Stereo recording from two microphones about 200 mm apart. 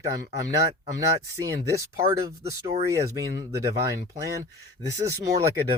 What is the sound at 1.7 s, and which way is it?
Speech, 15° right (ahead or behind).